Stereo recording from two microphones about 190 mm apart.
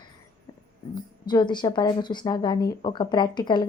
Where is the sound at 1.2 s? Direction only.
25° left (ahead or behind).